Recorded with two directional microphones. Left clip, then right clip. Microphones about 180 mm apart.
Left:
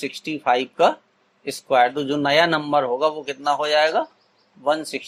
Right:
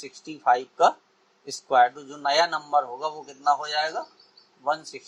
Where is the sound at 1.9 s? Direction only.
35° left (ahead or behind).